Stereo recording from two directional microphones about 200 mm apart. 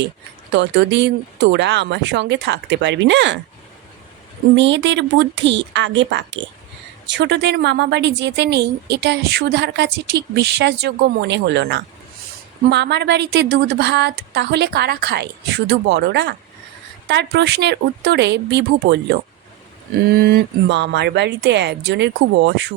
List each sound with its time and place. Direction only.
0.5 s a woman's voice: 60° right (ahead or behind)
4.5 s a woman's voice: 65° right (ahead or behind)